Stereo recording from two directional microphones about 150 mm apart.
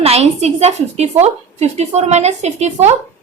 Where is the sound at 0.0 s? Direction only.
45° right (ahead or behind).